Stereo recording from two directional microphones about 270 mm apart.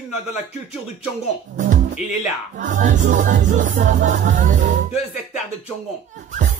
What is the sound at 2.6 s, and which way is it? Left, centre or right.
Music, right.